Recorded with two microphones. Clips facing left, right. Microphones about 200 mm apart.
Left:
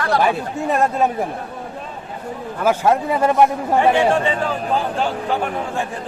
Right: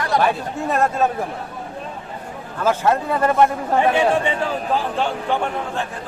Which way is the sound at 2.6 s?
10° left (ahead or behind).